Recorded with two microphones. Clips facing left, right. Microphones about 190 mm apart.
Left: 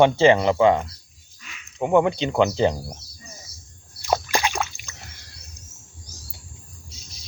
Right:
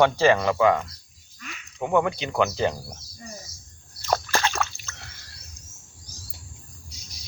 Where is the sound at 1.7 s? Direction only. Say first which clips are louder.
Left 4 dB; 20° left (ahead or behind).